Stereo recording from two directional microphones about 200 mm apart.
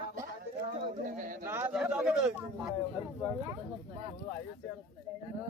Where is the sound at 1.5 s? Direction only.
10° right (ahead or behind).